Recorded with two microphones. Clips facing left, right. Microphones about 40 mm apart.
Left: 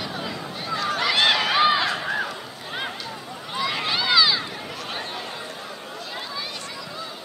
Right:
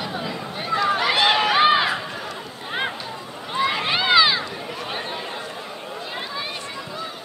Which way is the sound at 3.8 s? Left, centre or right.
Right.